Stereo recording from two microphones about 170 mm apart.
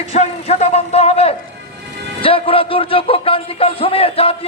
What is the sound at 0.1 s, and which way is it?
A man's voice, 40° left (ahead or behind).